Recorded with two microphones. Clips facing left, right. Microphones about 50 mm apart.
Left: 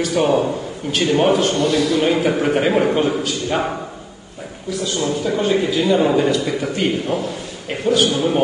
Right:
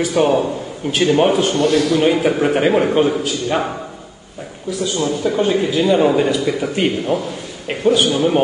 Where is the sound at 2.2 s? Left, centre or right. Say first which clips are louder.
Right 2 dB; centre.